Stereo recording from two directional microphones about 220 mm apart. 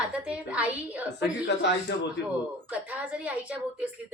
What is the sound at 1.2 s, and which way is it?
Speech, 50° left (ahead or behind).